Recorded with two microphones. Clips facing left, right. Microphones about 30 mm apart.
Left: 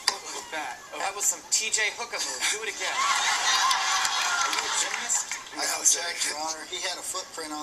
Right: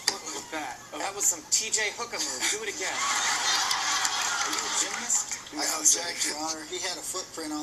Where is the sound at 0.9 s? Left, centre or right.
Left.